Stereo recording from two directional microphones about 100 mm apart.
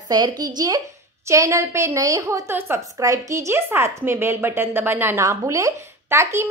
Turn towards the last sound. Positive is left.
turn(degrees=-25)  # may be behind; listen again after turning